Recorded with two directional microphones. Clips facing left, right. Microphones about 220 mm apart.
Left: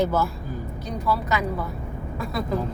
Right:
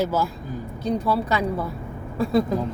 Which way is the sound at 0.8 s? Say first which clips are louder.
Right 4 dB; 30° right (ahead or behind).